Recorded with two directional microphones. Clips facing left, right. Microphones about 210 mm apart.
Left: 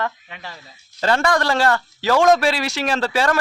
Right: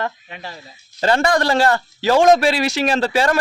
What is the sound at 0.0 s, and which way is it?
Speech, 35° right (ahead or behind).